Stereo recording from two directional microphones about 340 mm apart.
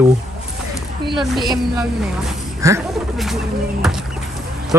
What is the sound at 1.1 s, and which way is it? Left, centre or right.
Speech, centre.